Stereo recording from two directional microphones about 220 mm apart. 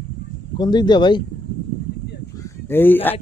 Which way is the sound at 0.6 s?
20° left (ahead or behind).